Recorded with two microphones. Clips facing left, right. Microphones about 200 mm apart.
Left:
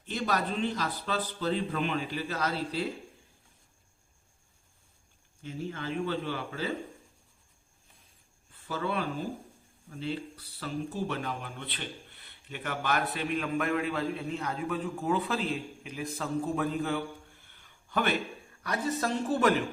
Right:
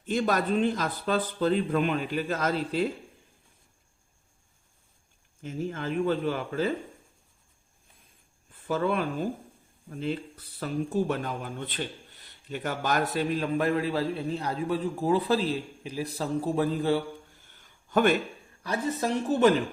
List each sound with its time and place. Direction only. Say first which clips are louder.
0.0 s speech: right 5 dB; 50° right (ahead or behind)
5.4 s speech: right 4 dB; 45° right (ahead or behind)
8.6 s speech: right 5 dB; 50° right (ahead or behind); by 17.0 s 30° right (ahead or behind)
17.5 s a sound: right 7 dB; 45° right (ahead or behind)
18.6 s a woman's voice: right 2 dB; 25° right (ahead or behind)